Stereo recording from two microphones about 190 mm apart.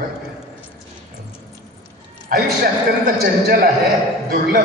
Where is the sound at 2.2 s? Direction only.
50° right (ahead or behind).